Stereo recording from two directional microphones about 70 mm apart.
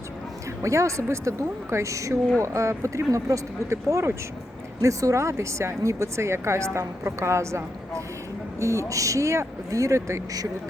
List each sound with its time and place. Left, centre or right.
0.6 s speech: right